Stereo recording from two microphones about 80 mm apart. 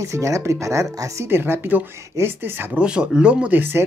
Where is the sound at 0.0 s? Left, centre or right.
Right.